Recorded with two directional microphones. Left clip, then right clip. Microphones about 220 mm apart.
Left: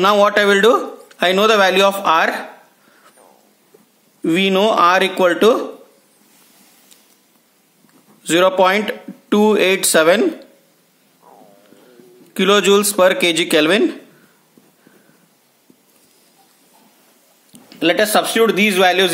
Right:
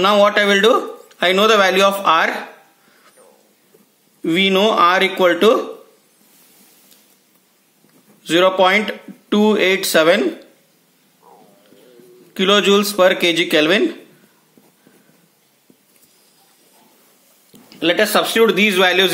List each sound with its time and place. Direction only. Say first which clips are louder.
0.0 s a man's voice: even; 25° left (ahead or behind)
4.2 s a man's voice: even; 20° left (ahead or behind)
8.2 s a man's voice: even; 20° left (ahead or behind)
12.4 s a man's voice: left 1 dB; 20° left (ahead or behind)
17.5 s speech: left 1 dB; 25° left (ahead or behind); by 19.0 s 10° left (ahead or behind)